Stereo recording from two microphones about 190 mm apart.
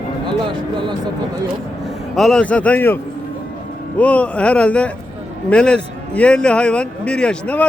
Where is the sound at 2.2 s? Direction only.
5° left (ahead or behind).